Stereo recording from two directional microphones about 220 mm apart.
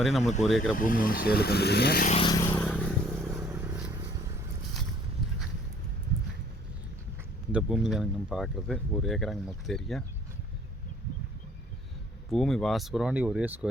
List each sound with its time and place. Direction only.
0.0 s speech: centre (ahead or behind)
0.7 s speech: 40° left (ahead or behind)
2.1 s vehicle: 20° left (ahead or behind)
3.2 s vehicle: 10° right (ahead or behind)
7.5 s speech: centre (ahead or behind)
12.3 s speech: centre (ahead or behind)